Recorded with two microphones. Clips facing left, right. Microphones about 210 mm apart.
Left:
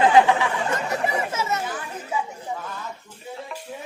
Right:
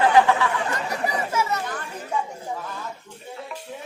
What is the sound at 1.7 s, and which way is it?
Speech, 5° left (ahead or behind).